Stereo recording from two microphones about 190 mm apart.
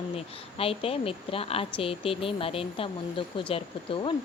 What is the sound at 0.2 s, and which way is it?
Speech, 30° left (ahead or behind).